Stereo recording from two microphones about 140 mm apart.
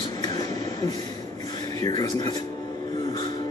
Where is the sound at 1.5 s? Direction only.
30° left (ahead or behind).